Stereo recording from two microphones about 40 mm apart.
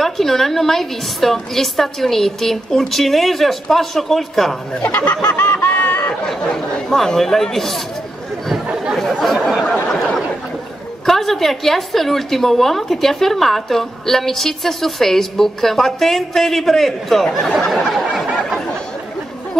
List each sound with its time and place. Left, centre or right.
0.0 s a woman's voice: centre
4.7 s chicken: left
5.6 s a sound: left
6.2 s speech: centre
8.9 s speech: centre
11.1 s a woman's voice: centre
17.6 s a sound: centre